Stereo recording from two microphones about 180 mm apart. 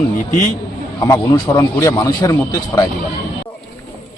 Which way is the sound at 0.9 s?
15° left (ahead or behind).